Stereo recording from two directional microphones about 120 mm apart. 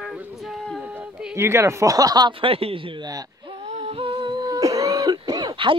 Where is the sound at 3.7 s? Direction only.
60° right (ahead or behind).